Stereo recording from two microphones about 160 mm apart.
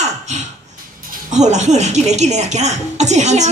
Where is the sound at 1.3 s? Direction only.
45° right (ahead or behind).